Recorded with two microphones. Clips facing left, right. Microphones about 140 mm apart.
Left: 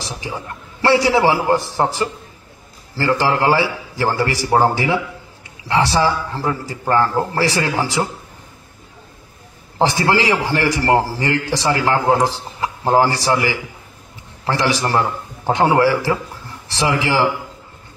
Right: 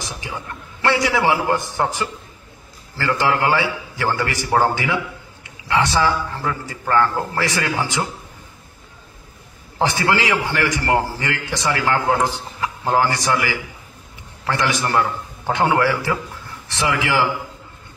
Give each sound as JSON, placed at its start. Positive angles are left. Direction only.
{"t": 0.8, "sound": "a man's voice", "side_deg": 30}
{"t": 9.8, "sound": "a man's voice", "side_deg": 30}